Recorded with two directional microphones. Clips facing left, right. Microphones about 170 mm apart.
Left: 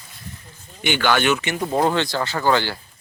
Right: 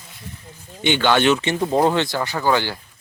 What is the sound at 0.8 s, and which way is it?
Speech, 25° right (ahead or behind).